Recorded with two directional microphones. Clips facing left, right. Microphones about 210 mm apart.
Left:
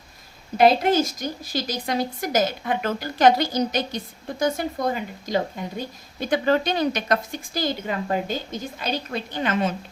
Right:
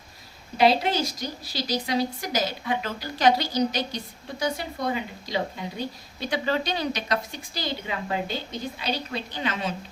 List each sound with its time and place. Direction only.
0.5 s a woman's voice: 50° left (ahead or behind)